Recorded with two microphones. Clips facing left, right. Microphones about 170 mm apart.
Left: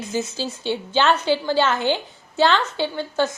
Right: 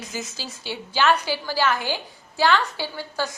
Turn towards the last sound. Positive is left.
turn(degrees=20)  # may be behind; listen again after turning